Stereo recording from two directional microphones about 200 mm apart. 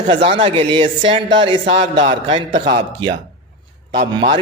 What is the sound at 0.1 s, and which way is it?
A man's voice, 25° right (ahead or behind).